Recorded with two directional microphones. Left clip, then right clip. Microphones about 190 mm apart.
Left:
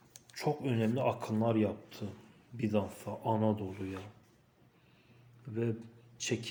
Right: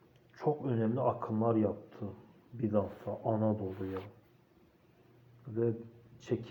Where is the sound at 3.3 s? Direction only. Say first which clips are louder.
Left 1 dB; 15° left (ahead or behind).